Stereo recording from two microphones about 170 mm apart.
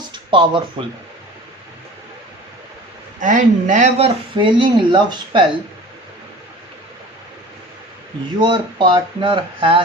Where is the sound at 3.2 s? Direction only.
50° right (ahead or behind).